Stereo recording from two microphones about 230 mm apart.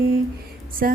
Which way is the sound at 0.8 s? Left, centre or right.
Right.